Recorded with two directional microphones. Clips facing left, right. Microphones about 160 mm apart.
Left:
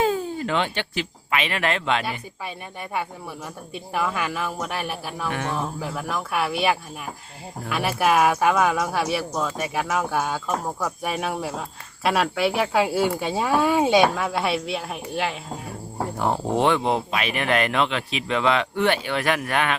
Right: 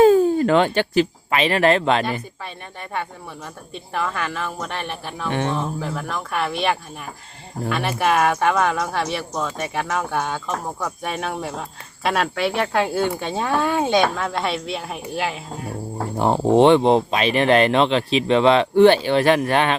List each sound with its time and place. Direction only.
0.0 s speech: 45° right (ahead or behind)
3.9 s speech: 10° left (ahead or behind)
5.3 s speech: 30° right (ahead or behind)
5.5 s speech: 5° left (ahead or behind)
16.1 s speech: 25° right (ahead or behind)